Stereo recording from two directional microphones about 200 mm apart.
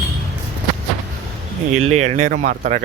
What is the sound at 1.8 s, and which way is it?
Speech, 35° right (ahead or behind).